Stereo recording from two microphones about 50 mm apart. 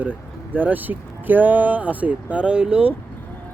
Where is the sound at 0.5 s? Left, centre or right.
Right.